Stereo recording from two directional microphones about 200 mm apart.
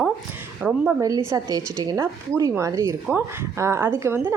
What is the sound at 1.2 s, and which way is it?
A woman's voice, 15° right (ahead or behind).